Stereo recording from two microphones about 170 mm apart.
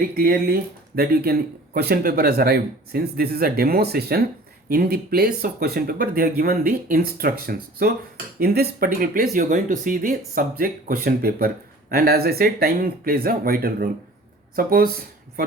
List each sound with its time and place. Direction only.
0.1 s speech: 65° right (ahead or behind)